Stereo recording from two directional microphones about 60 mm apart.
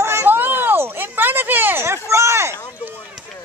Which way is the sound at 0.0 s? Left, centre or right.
Right.